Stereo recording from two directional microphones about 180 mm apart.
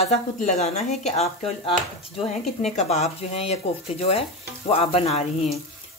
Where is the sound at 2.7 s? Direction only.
40° left (ahead or behind).